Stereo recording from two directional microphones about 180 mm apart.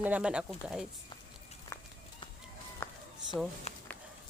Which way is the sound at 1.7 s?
15° left (ahead or behind).